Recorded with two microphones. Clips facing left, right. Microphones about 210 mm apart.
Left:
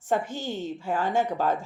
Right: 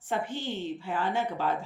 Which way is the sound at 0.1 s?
45° left (ahead or behind).